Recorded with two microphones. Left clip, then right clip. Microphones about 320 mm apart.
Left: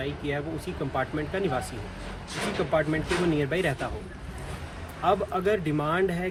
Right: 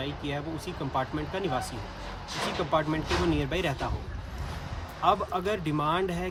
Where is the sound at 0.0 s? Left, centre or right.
Right.